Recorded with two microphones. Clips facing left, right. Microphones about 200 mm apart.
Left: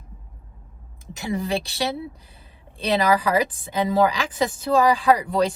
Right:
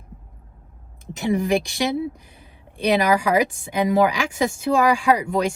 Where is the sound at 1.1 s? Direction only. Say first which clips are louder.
Right 5 dB; 15° right (ahead or behind).